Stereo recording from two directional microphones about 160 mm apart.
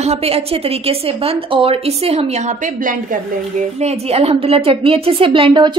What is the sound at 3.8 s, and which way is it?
A woman's voice, 40° right (ahead or behind).